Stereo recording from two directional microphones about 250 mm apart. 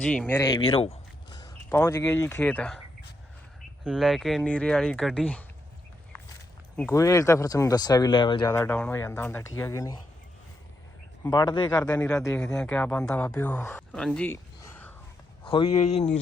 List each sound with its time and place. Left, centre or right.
0.0 s speech: centre
3.8 s speech: centre
6.7 s speech: centre
11.2 s speech: centre
15.4 s speech: centre